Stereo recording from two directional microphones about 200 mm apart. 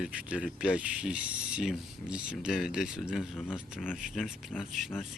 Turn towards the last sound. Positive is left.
turn(degrees=0)  # may be behind; listen again after turning